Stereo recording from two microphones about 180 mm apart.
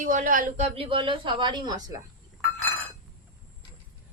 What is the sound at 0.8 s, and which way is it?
A woman's voice, 30° right (ahead or behind).